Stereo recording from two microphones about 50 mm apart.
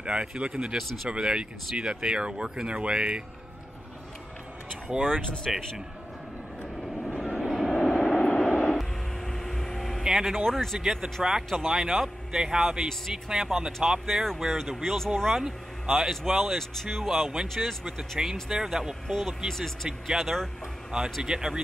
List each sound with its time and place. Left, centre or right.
0.0 s speech: right
4.8 s speech: right
5.5 s speech: centre
7.3 s vehicle: centre
8.2 s vehicle: centre
8.5 s vehicle: centre
10.0 s speech: centre
10.3 s speech: centre
10.8 s speech: centre
19.0 s speech: centre
20.9 s speech: centre